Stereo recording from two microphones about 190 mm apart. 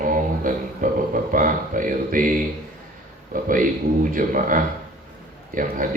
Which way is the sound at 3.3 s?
45° right (ahead or behind).